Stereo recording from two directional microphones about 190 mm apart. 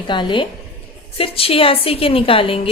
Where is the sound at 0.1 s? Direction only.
25° left (ahead or behind).